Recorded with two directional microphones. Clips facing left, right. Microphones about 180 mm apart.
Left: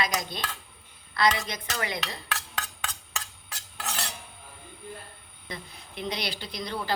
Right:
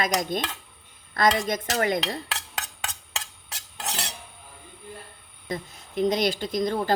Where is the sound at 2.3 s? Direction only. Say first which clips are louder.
Even; 25° right (ahead or behind).